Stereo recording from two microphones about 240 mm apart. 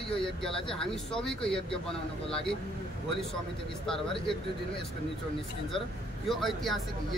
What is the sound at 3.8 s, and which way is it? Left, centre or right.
Speech, centre.